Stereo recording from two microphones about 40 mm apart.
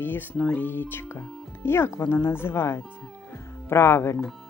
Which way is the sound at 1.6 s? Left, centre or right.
Left.